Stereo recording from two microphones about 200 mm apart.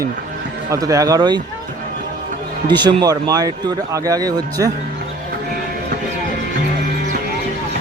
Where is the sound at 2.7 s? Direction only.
20° right (ahead or behind).